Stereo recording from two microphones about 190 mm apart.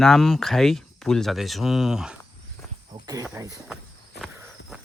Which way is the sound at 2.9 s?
20° right (ahead or behind).